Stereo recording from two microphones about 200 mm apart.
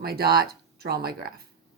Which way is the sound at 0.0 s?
50° right (ahead or behind).